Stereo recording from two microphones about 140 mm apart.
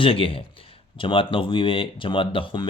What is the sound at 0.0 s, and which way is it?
Speech, 40° left (ahead or behind).